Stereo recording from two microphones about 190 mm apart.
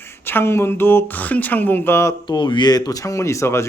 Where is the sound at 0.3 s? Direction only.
10° left (ahead or behind).